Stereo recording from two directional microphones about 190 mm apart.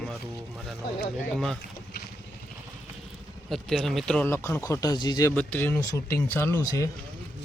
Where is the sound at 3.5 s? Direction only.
Centre (ahead or behind); by 5.3 s 20° left (ahead or behind).